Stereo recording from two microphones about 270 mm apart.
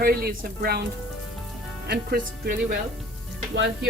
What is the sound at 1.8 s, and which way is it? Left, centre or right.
Speech, right.